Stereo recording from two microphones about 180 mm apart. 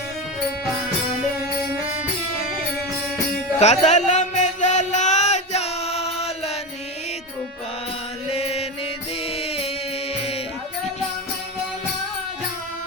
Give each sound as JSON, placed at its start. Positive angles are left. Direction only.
{"t": 3.6, "sound": "music", "side_deg": 40}
{"t": 8.3, "sound": "mantra", "side_deg": 35}
{"t": 9.4, "sound": "music", "side_deg": 35}